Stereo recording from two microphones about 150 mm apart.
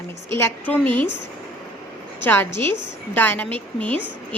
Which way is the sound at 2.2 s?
15° left (ahead or behind).